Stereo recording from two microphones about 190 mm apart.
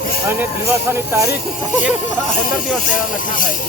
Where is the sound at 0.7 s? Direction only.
15° right (ahead or behind).